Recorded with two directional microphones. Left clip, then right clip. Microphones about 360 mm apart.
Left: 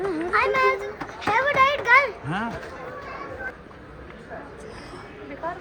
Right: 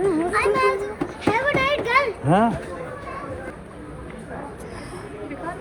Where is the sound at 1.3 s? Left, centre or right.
Centre.